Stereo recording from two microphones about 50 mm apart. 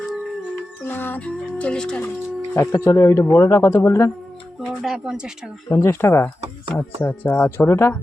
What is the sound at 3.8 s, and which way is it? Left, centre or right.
Speech, left.